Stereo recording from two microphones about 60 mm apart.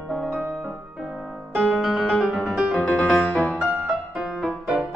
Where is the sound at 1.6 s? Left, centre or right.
Centre.